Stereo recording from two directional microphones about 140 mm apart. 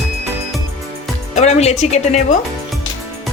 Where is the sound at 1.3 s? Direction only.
55° left (ahead or behind).